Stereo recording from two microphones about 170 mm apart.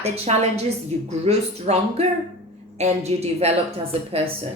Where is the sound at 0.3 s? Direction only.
40° right (ahead or behind).